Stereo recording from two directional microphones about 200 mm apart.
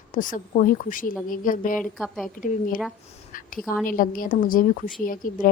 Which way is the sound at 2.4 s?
45° left (ahead or behind).